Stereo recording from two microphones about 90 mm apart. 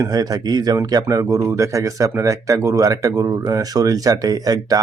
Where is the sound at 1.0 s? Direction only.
35° right (ahead or behind).